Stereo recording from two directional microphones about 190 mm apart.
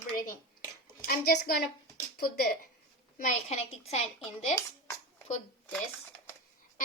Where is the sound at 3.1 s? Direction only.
40° left (ahead or behind).